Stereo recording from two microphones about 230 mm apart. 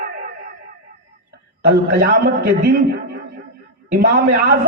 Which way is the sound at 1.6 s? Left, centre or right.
Right.